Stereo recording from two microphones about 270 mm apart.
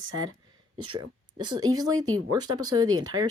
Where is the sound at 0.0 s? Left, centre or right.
Right.